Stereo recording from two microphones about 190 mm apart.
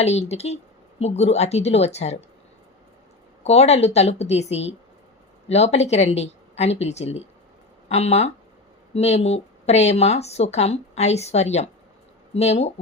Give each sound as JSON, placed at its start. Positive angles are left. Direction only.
{"t": 0.0, "sound": "speech", "side_deg": 35}
{"t": 3.4, "sound": "speech", "side_deg": 35}